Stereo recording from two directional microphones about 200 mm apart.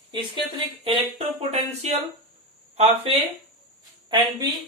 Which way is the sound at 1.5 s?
35° right (ahead or behind).